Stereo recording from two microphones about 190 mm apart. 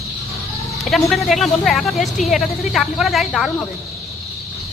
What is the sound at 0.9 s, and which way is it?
Speech, centre (ahead or behind).